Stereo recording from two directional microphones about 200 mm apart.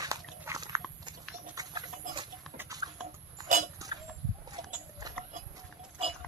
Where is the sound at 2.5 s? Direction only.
15° right (ahead or behind).